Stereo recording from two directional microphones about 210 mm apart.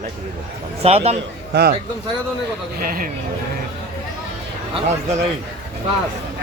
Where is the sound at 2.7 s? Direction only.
45° right (ahead or behind).